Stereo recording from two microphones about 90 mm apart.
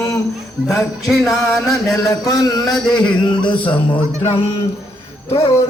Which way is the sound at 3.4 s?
65° left (ahead or behind).